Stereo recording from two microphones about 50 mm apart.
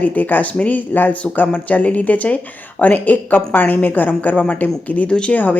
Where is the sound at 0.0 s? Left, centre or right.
Left.